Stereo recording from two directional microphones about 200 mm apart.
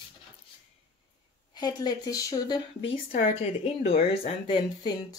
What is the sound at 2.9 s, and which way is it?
Speech, 40° left (ahead or behind).